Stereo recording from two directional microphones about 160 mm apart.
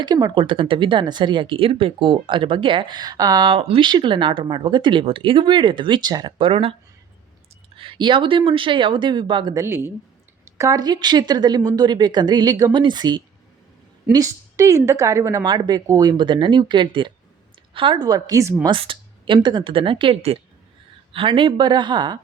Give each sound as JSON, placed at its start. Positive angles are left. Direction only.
{"t": 0.0, "sound": "speech", "side_deg": -25}
{"t": 6.5, "sound": "speech", "side_deg": -40}
{"t": 7.8, "sound": "speech", "side_deg": -30}
{"t": 9.6, "sound": "a woman's voice", "side_deg": -15}
{"t": 18.7, "sound": "a woman's voice", "side_deg": -30}